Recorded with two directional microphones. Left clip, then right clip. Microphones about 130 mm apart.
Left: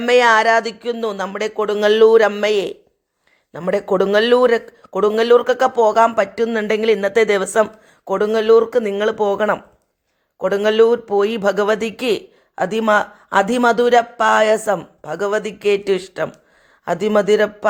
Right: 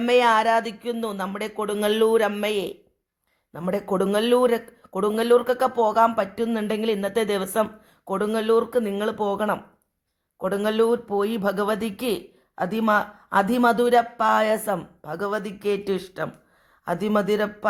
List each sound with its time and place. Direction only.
0.0 s speech: 25° left (ahead or behind)